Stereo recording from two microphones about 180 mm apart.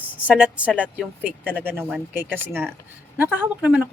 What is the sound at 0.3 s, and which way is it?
Speech, 5° right (ahead or behind).